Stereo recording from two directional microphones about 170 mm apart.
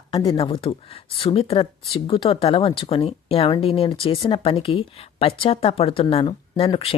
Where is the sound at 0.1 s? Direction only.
30° left (ahead or behind).